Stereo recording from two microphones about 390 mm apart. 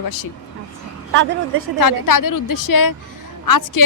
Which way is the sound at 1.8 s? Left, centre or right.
Left.